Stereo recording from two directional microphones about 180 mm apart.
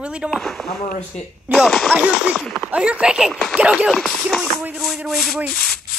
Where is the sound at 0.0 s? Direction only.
5° right (ahead or behind).